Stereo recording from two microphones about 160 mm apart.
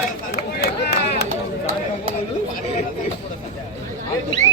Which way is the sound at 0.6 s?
90° left.